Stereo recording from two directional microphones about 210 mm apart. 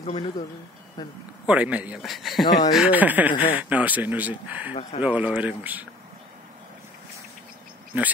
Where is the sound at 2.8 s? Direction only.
5° right (ahead or behind).